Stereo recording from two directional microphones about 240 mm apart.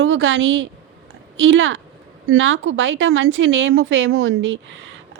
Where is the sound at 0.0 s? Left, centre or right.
Right.